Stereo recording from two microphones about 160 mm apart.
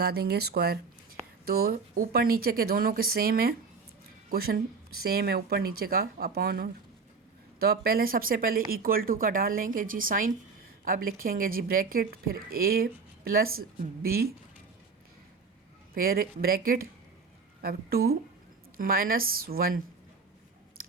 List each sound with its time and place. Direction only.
0.0 s speech: 80° right
1.5 s speech: 70° right (ahead or behind)
16.0 s speech: 65° right (ahead or behind)